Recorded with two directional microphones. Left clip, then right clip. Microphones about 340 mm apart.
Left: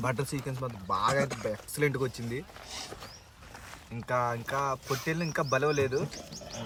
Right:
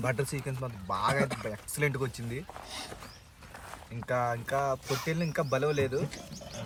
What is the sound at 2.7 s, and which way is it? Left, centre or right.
Speech, centre.